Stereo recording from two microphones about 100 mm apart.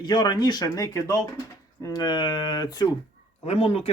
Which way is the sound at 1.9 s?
45° left (ahead or behind).